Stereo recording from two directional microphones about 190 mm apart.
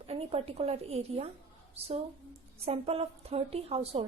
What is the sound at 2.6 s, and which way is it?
A woman's voice, 30° right (ahead or behind).